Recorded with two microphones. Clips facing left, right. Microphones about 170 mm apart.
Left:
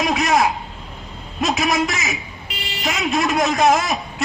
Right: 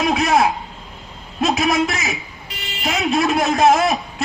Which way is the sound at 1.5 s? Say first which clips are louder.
Right 2 dB; 55° right (ahead or behind).